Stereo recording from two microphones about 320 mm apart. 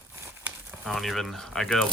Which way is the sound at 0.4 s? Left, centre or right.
Centre.